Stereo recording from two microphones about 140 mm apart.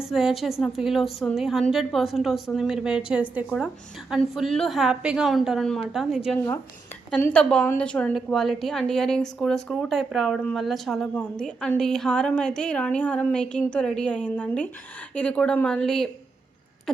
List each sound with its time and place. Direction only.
0.0 s a woman's voice: 5° right (ahead or behind)
7.2 s a woman's voice: 10° left (ahead or behind)